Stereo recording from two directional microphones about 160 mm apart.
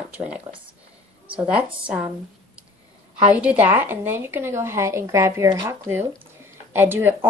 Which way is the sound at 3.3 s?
10° right (ahead or behind).